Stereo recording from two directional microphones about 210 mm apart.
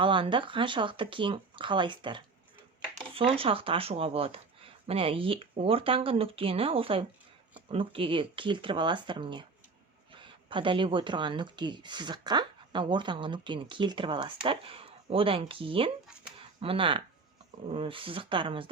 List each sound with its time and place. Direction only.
0.0 s speech: 25° right (ahead or behind)